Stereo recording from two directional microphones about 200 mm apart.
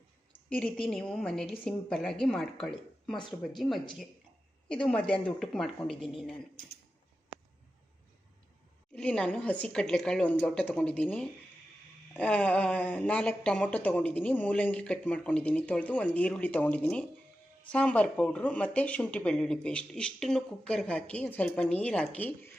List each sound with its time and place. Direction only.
0.5 s speech: 5° left (ahead or behind)
4.7 s speech: 5° left (ahead or behind)
9.0 s speech: 5° left (ahead or behind)